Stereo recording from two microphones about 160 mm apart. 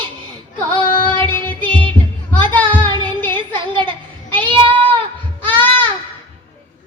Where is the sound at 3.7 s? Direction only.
30° right (ahead or behind).